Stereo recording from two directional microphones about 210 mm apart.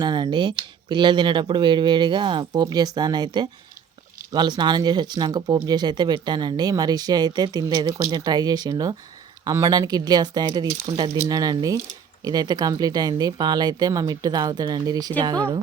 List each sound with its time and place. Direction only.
0.0 s speech: 20° right (ahead or behind)